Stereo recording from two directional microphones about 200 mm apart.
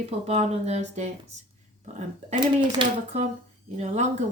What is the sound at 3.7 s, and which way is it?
Speech, 35° right (ahead or behind).